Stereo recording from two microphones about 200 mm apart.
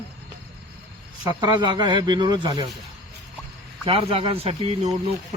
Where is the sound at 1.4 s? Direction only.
25° right (ahead or behind).